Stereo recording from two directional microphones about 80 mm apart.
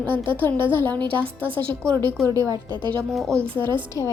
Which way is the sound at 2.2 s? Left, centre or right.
Right.